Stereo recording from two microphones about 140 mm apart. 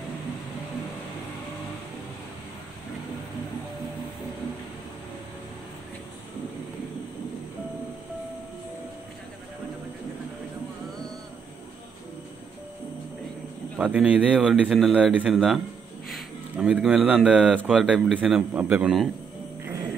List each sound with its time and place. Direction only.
13.7 s speech: 10° right (ahead or behind)